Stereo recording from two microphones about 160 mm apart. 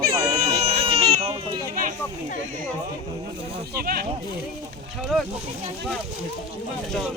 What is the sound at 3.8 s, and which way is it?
Speech, 70° right (ahead or behind).